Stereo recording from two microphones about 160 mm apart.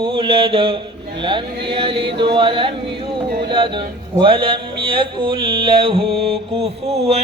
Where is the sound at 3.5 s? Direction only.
30° right (ahead or behind).